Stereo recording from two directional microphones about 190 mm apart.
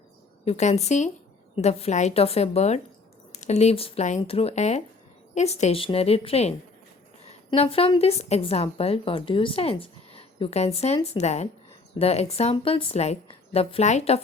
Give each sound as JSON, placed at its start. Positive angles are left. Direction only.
{"t": 0.4, "sound": "a woman's voice", "side_deg": 35}